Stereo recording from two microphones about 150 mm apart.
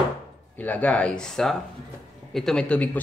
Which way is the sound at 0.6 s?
10° left (ahead or behind).